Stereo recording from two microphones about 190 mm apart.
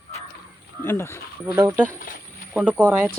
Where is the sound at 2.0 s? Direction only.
45° left (ahead or behind).